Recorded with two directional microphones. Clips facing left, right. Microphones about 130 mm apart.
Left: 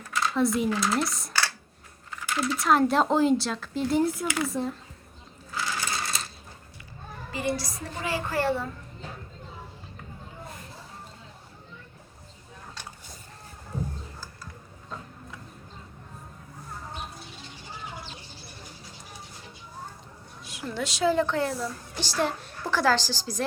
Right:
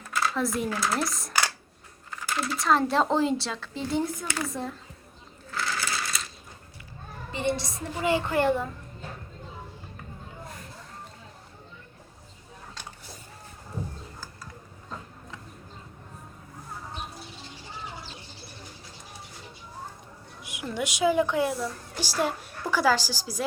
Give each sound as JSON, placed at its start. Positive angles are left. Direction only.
{"t": 0.1, "sound": "speech", "side_deg": 0}
{"t": 1.3, "sound": "a sound", "side_deg": -15}
{"t": 2.3, "sound": "speech", "side_deg": 0}
{"t": 5.6, "sound": "a sound", "side_deg": 20}
{"t": 7.3, "sound": "a woman's voice", "side_deg": -25}
{"t": 20.4, "sound": "a woman's voice", "side_deg": -15}